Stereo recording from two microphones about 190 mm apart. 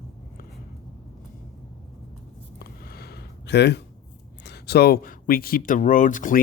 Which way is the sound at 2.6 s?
55° left (ahead or behind).